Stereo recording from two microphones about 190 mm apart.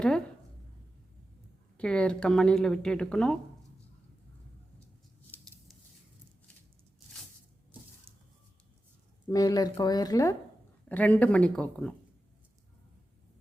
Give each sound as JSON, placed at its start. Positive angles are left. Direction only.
{"t": 1.8, "sound": "a woman's voice", "side_deg": 5}
{"t": 8.1, "sound": "a sound", "side_deg": -30}
{"t": 9.3, "sound": "speech", "side_deg": 20}
{"t": 10.8, "sound": "speech", "side_deg": 10}